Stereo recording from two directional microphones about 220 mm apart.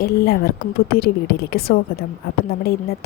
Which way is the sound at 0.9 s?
45° left (ahead or behind).